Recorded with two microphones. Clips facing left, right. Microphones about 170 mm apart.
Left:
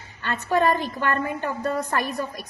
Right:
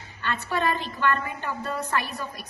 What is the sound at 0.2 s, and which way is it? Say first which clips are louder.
Speech: left 5 dB; 45° left (ahead or behind).